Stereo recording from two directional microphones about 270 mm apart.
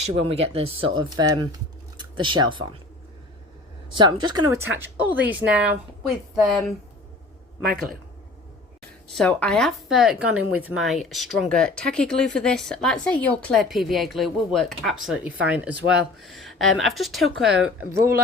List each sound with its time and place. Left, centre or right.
0.0 s speech: right
3.9 s speech: centre
9.1 s speech: centre